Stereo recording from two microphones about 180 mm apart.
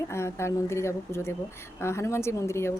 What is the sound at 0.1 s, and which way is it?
Speech, 15° left (ahead or behind).